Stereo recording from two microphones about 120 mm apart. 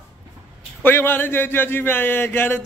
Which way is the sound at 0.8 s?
20° left (ahead or behind).